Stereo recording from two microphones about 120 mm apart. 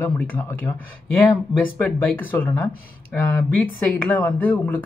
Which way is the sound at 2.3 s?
15° left (ahead or behind).